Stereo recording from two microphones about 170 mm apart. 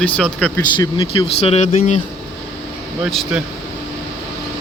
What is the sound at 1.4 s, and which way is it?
Speech, 40° left (ahead or behind).